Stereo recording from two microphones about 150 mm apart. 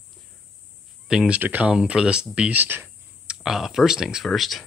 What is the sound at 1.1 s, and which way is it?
Speech, 5° right (ahead or behind).